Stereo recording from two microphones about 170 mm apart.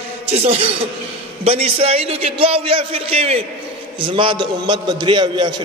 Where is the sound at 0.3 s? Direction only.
35° right (ahead or behind).